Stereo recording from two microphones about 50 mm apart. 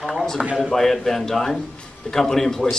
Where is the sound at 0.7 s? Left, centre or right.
Centre.